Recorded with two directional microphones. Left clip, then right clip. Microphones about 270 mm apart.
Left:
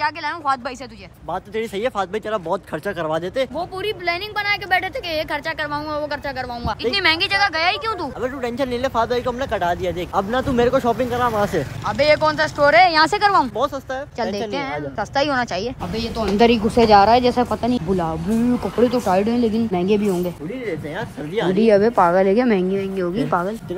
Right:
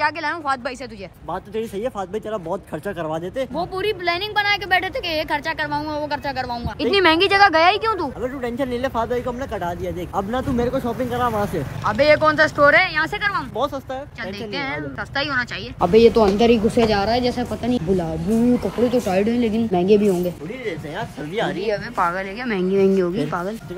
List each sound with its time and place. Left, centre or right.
0.0 s a woman's voice: centre
1.3 s a woman's voice: centre
11.1 s a woman's voice: centre
12.9 s a woman's voice: centre
16.7 s speech: left
17.5 s a woman's voice: centre
21.8 s a woman's voice: centre